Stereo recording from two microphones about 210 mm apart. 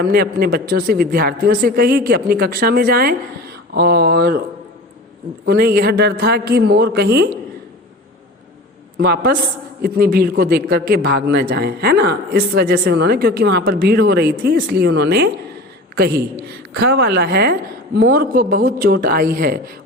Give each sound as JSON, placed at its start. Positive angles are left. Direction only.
{"t": 0.0, "sound": "speech", "side_deg": -45}
{"t": 5.5, "sound": "speech", "side_deg": -45}
{"t": 9.0, "sound": "speech", "side_deg": -50}